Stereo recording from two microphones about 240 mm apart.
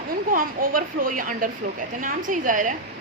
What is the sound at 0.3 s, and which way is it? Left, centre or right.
A woman's voice, right.